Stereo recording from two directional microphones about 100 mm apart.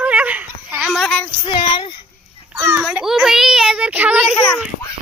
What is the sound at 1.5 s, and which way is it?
Child singing, 55° left (ahead or behind).